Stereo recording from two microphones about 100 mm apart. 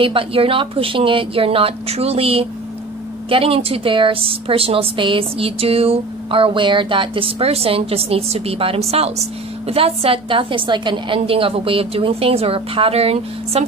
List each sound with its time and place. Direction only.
0.0 s a woman's voice: 60° right (ahead or behind); by 9.1 s 90° right
9.7 s a woman's voice: 75° right (ahead or behind); by 11.1 s 50° right (ahead or behind)
11.1 s a woman's voice: 65° right (ahead or behind); by 13.7 s 90° right